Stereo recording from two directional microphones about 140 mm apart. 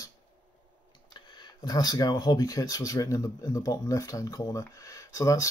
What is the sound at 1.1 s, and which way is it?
Speech, 30° left (ahead or behind).